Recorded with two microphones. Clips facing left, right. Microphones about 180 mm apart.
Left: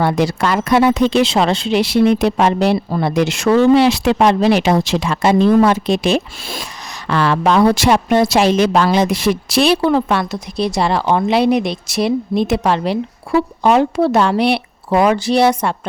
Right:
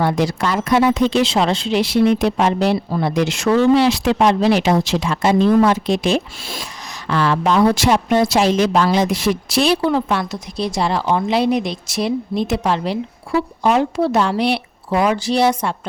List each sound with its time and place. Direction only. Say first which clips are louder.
0.0 s speech: left 2 dB; 70° left (ahead or behind)